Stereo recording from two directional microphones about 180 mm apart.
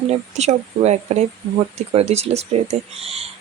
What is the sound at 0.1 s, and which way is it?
Speech, 35° right (ahead or behind).